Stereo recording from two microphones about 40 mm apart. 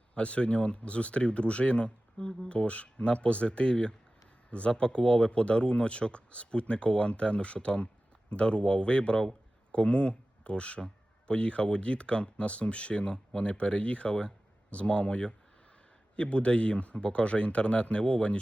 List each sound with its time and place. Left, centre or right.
0.1 s speech: left